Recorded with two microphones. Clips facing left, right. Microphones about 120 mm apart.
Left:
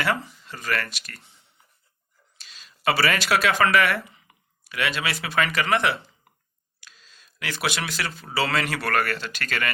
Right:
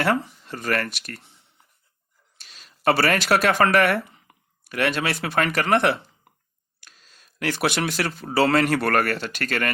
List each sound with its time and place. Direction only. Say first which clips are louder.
0.0 s speech: right 4 dB; 55° right (ahead or behind)
2.4 s speech: right 3 dB; 50° right (ahead or behind)
4.1 s a sound: right 2 dB; 45° right (ahead or behind)
5.2 s speech: even; 50° right (ahead or behind)